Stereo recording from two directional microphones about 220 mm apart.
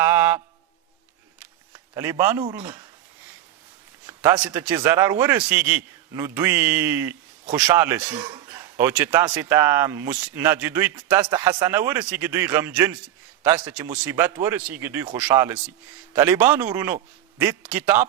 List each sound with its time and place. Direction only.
0.0 s mantra: 10° right (ahead or behind)
1.7 s speech: 15° right (ahead or behind)
4.0 s a man's voice: 15° right (ahead or behind)
14.0 s speech: 10° right (ahead or behind)